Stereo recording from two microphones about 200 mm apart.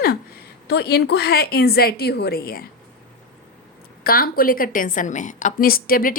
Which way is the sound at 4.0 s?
45° left (ahead or behind).